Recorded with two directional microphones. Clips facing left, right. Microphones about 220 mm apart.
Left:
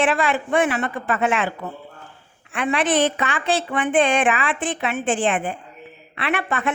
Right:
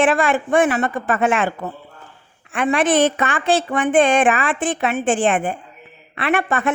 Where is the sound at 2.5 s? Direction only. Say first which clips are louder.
Right 4 dB; 45° right (ahead or behind).